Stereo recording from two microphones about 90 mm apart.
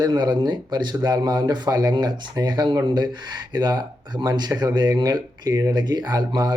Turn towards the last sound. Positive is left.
turn(degrees=-50)  # may be behind; listen again after turning